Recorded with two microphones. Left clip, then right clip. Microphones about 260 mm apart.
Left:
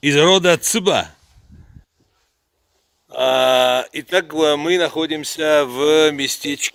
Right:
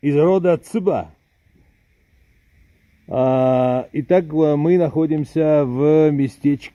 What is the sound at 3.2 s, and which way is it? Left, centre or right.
Speech, centre.